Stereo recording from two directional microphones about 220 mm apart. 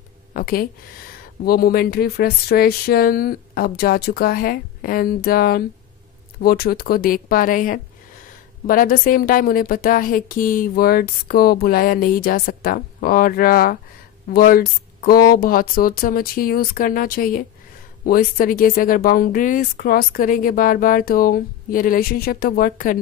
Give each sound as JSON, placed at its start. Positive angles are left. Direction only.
{"t": 0.3, "sound": "speech", "side_deg": 40}